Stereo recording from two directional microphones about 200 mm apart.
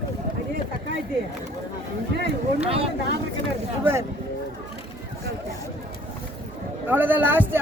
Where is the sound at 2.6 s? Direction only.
30° right (ahead or behind).